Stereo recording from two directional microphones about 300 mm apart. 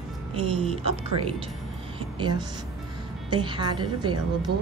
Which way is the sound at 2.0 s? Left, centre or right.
Centre.